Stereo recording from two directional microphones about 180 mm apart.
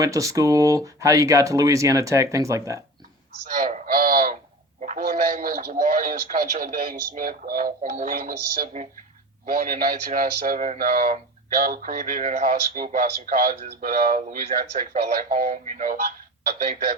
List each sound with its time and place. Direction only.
0.0 s speech: 20° right (ahead or behind)
3.6 s a sound: 45° right (ahead or behind)
4.8 s a man's voice: 45° right (ahead or behind)